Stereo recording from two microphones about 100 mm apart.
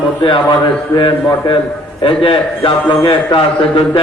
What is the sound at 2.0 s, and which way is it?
A man's voice, 60° left (ahead or behind).